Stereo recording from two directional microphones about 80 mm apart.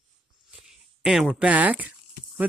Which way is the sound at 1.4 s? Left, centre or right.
Centre.